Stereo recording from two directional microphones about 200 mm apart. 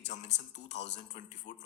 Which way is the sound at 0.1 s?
35° left (ahead or behind).